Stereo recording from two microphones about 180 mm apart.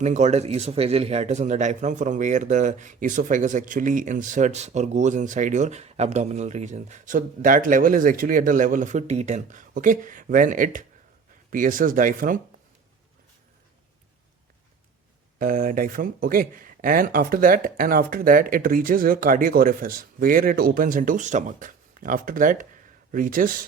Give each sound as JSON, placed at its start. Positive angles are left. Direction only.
{"t": 0.0, "sound": "speech", "side_deg": -40}
{"t": 15.4, "sound": "speech", "side_deg": -50}